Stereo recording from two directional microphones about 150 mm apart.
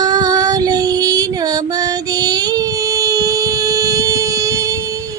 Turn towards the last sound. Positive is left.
turn(degrees=-20)  # may be behind; listen again after turning